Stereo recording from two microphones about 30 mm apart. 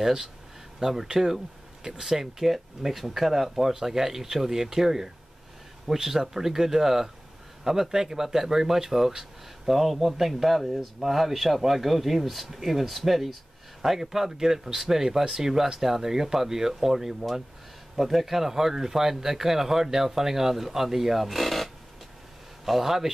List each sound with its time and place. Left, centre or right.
0.0 s speech: centre
22.7 s speech: centre